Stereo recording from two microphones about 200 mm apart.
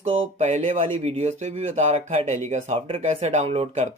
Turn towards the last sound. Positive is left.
turn(degrees=-30)  # may be behind; listen again after turning